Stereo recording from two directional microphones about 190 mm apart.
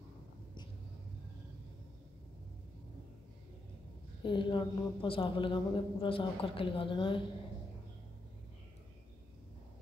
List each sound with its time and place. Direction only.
4.2 s a man's voice: 25° left (ahead or behind)